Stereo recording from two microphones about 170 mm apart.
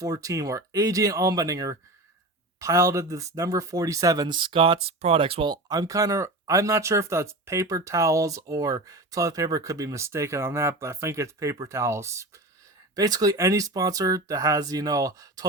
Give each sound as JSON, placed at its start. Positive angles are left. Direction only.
{"t": 0.0, "sound": "speech", "side_deg": -20}